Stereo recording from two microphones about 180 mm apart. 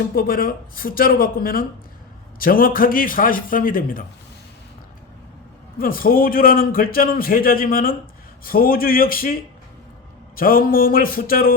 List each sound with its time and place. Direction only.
0.1 s a man's voice: 55° left (ahead or behind)
5.8 s a man's voice: 55° left (ahead or behind)
10.3 s a man's voice: 55° left (ahead or behind)